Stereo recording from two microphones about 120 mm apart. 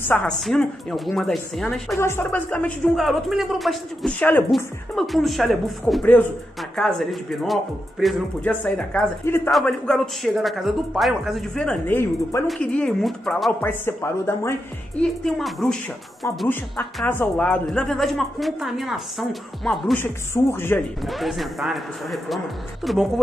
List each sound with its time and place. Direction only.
0.1 s a woman's voice: 5° left (ahead or behind)
2.0 s speech: 20° left (ahead or behind)
3.0 s a woman's voice: centre (ahead or behind)
4.2 s speech: 15° left (ahead or behind)
4.5 s a woman's voice: centre (ahead or behind)
9.2 s speech: 20° left (ahead or behind)
9.7 s a woman's voice: 5° left (ahead or behind)
11.9 s speech: 20° left (ahead or behind)
12.4 s a woman's voice: 10° left (ahead or behind)
13.6 s speech: 15° left (ahead or behind)
15.0 s a woman's voice: centre (ahead or behind)
16.4 s a woman's voice: 15° left (ahead or behind)
20.4 s speech: 25° left (ahead or behind)
21.0 s a woman's voice: centre (ahead or behind)